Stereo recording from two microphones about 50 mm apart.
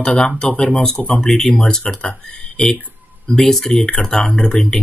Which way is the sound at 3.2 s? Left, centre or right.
Centre.